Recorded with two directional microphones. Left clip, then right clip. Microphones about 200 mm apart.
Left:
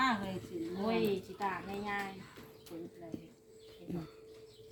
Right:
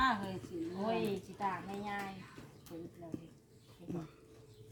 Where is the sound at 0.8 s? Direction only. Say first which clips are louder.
Left 3 dB; 25° right (ahead or behind).